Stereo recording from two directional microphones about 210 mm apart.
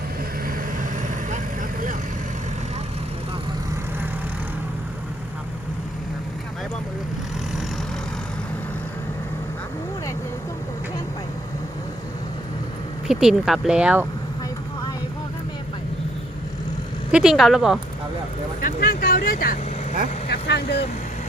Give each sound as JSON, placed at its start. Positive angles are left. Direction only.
{"t": 13.1, "sound": "speech", "side_deg": -5}
{"t": 17.1, "sound": "speech", "side_deg": -5}
{"t": 18.6, "sound": "speech", "side_deg": 40}